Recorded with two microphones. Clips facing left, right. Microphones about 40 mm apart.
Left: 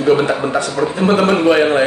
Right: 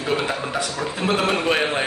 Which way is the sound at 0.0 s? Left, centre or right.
Centre.